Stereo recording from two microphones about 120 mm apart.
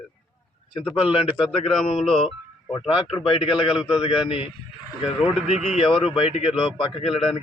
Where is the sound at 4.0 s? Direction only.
50° left (ahead or behind).